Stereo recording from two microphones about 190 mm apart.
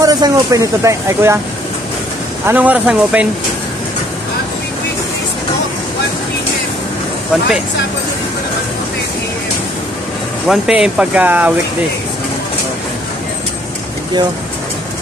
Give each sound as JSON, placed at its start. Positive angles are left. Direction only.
{"t": 0.0, "sound": "speech", "side_deg": -20}
{"t": 2.4, "sound": "speech", "side_deg": -10}
{"t": 10.5, "sound": "speech", "side_deg": -5}